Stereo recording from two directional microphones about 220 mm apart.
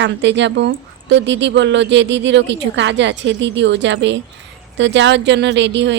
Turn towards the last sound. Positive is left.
turn(degrees=-55)  # may be behind; listen again after turning